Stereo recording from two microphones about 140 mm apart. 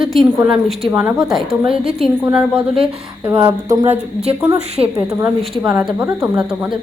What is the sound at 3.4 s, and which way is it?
A woman's voice, 25° right (ahead or behind).